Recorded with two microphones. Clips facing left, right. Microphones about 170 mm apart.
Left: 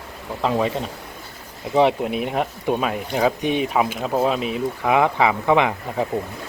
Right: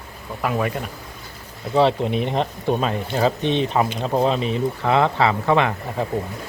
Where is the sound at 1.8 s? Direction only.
10° left (ahead or behind).